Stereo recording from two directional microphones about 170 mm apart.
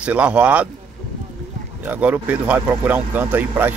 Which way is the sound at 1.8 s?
10° right (ahead or behind).